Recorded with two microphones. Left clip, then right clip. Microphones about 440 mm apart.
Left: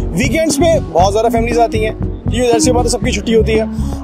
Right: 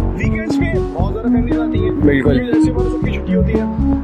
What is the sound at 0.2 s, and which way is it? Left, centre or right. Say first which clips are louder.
Speech: left 8 dB; left.